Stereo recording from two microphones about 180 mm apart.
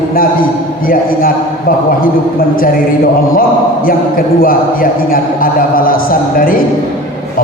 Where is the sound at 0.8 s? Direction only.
50° left (ahead or behind).